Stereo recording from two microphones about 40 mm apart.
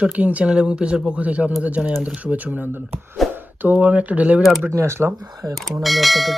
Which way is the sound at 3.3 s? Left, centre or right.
Right.